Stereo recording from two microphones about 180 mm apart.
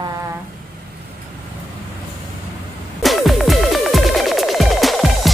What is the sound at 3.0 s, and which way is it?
Music, centre (ahead or behind).